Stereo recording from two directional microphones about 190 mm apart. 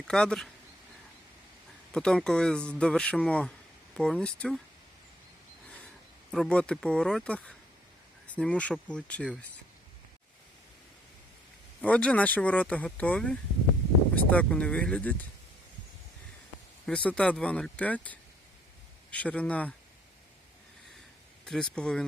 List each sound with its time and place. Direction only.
0.1 s speech: 5° left (ahead or behind)
1.9 s speech: 5° left (ahead or behind)
6.3 s speech: 5° left (ahead or behind)
11.8 s speech: 5° left (ahead or behind)
16.8 s speech: 5° left (ahead or behind)
21.4 s speech: 5° left (ahead or behind)